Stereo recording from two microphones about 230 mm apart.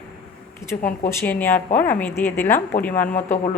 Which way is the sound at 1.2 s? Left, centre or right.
Centre.